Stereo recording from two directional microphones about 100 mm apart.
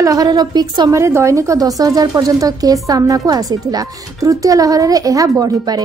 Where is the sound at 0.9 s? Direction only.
30° right (ahead or behind).